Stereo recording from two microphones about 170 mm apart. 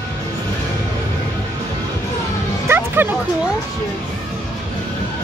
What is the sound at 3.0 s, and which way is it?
Speech, 15° right (ahead or behind).